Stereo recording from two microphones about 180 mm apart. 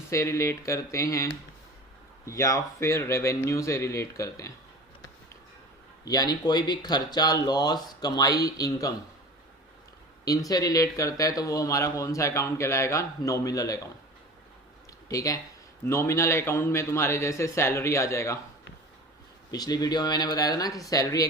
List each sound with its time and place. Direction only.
0.1 s speech: 15° left (ahead or behind)
6.1 s speech: 20° left (ahead or behind)
10.2 s speech: 20° left (ahead or behind)
15.1 s speech: 20° left (ahead or behind)
19.5 s speech: 20° left (ahead or behind)